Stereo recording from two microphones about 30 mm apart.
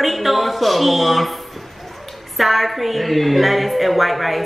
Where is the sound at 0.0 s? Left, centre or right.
Centre.